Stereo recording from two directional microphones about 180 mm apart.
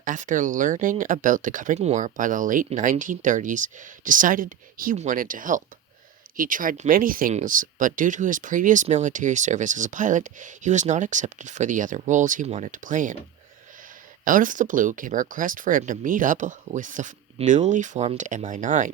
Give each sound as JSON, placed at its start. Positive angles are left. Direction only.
{"t": 0.0, "sound": "speech", "side_deg": -45}
{"t": 14.3, "sound": "speech", "side_deg": -45}